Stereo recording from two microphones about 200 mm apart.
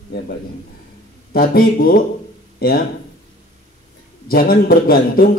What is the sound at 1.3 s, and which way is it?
A man's voice, 50° left (ahead or behind).